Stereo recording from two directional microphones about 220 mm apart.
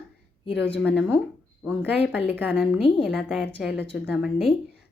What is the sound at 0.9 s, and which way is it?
Speech, 5° right (ahead or behind).